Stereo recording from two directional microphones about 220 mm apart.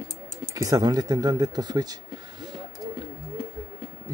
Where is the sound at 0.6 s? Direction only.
15° right (ahead or behind).